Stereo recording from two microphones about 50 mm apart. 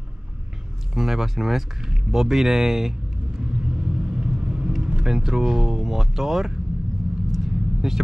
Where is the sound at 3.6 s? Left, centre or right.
Centre.